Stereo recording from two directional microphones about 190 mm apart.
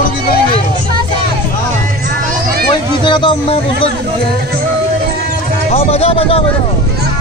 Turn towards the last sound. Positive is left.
turn(degrees=30)  # may be behind; listen again after turning